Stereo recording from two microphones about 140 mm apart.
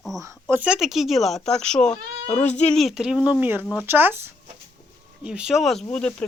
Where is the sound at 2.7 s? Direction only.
Centre (ahead or behind).